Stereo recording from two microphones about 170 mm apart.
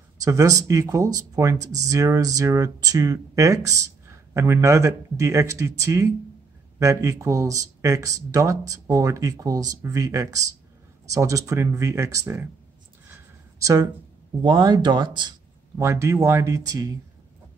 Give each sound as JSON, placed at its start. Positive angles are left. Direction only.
{"t": 0.2, "sound": "speech", "side_deg": -20}
{"t": 13.6, "sound": "speech", "side_deg": -20}
{"t": 15.8, "sound": "speech", "side_deg": -15}